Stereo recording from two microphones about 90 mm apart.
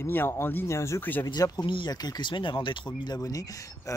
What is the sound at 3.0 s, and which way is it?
Speech, 45° left (ahead or behind).